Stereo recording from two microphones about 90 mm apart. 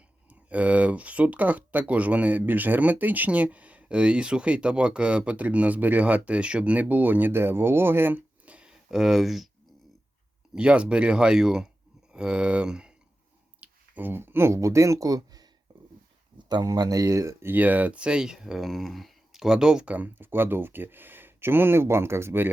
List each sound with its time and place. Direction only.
0.3 s speech: 15° right (ahead or behind)
10.5 s speech: 10° right (ahead or behind)
13.6 s speech: 20° right (ahead or behind)